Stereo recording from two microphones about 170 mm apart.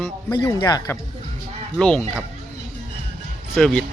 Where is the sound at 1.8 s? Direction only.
5° left (ahead or behind).